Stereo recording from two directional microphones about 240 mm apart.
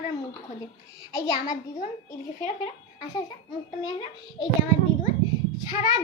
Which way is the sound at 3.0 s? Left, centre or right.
Centre.